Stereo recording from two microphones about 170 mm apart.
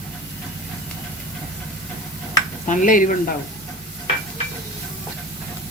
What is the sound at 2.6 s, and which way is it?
Stir, 50° left (ahead or behind).